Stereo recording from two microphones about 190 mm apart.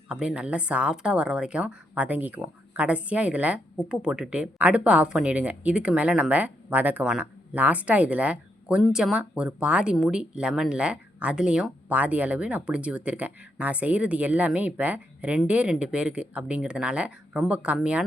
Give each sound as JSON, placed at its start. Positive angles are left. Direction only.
{"t": 0.1, "sound": "a woman's voice", "side_deg": -5}